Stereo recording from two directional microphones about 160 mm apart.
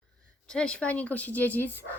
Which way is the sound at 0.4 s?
5° left (ahead or behind).